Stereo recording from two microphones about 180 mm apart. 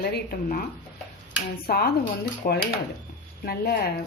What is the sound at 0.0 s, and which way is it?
Speech, 55° left (ahead or behind).